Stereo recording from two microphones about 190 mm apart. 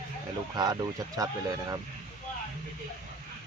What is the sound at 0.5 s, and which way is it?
Speech, 20° right (ahead or behind).